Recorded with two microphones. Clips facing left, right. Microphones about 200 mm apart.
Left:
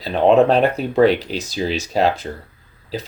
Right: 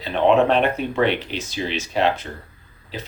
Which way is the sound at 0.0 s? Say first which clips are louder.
Left 3 dB; 40° left (ahead or behind).